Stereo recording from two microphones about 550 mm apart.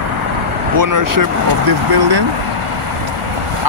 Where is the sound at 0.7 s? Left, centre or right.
Right.